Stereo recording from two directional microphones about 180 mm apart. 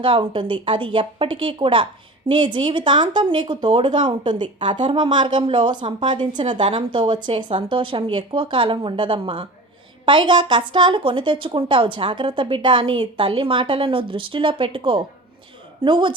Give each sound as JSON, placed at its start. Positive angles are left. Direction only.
{"t": 0.0, "sound": "a woman's voice", "side_deg": -30}